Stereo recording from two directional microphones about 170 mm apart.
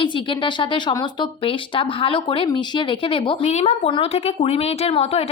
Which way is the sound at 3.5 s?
40° left (ahead or behind).